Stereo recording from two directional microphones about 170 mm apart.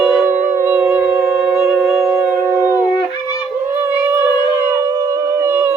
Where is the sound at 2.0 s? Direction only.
15° right (ahead or behind).